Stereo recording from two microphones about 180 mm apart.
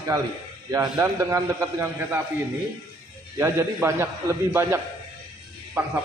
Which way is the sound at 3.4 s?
15° right (ahead or behind).